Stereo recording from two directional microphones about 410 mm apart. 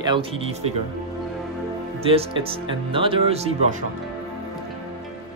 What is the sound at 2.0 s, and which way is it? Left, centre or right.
Speech, centre.